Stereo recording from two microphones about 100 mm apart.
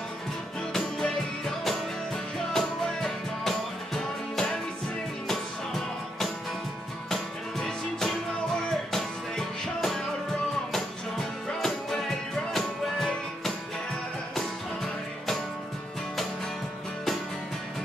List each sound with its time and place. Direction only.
0.7 s music: 5° left (ahead or behind)
7.1 s music: 5° left (ahead or behind)